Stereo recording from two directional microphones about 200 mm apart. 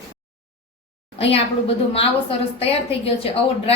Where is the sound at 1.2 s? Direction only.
30° left (ahead or behind).